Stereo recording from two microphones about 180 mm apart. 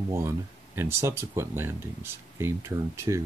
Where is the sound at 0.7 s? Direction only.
15° right (ahead or behind).